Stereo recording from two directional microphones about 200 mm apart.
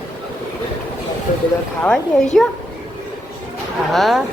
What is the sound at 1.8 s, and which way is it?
Speech, 5° left (ahead or behind).